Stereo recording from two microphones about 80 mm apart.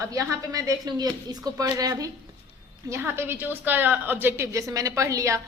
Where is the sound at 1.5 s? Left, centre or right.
Right.